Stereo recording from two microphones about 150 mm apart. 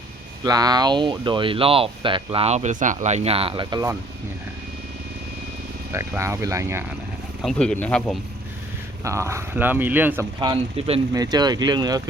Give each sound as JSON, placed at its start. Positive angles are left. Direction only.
{"t": 0.4, "sound": "speech", "side_deg": -25}
{"t": 5.9, "sound": "speech", "side_deg": -20}
{"t": 7.4, "sound": "speech", "side_deg": 5}
{"t": 9.0, "sound": "speech", "side_deg": -20}
{"t": 10.4, "sound": "speech", "side_deg": -35}
{"t": 11.1, "sound": "speech", "side_deg": -25}